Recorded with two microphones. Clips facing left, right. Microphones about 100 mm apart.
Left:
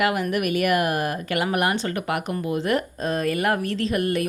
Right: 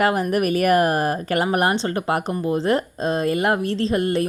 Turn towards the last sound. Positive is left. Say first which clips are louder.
# right 3 dB
turn(degrees=-30)  # may be behind; listen again after turning